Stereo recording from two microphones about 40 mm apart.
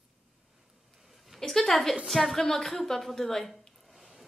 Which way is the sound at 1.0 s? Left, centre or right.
Centre.